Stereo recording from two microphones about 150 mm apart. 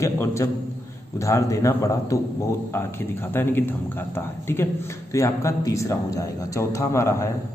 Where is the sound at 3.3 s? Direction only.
15° left (ahead or behind).